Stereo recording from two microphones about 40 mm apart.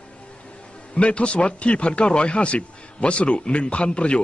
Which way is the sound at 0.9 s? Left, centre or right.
Left.